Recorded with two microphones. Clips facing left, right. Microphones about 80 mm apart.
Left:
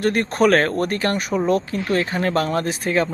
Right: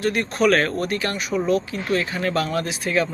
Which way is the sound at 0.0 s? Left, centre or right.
Left.